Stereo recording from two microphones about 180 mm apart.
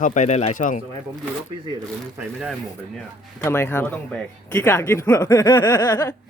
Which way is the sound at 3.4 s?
15° left (ahead or behind).